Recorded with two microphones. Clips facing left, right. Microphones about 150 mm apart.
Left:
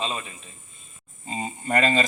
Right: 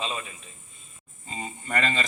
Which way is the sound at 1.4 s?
50° left (ahead or behind).